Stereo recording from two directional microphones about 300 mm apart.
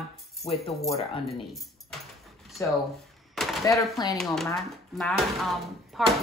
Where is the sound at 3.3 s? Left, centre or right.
Centre.